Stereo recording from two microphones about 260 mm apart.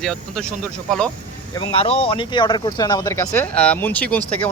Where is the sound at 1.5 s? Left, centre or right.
Centre.